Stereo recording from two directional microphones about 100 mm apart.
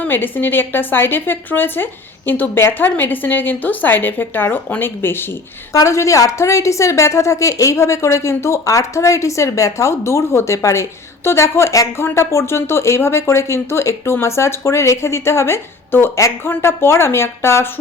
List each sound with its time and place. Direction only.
0.0 s speech: 20° left (ahead or behind)
5.7 s a woman's voice: 30° left (ahead or behind)